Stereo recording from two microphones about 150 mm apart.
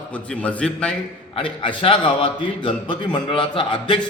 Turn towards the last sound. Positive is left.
turn(degrees=35)  # may be behind; listen again after turning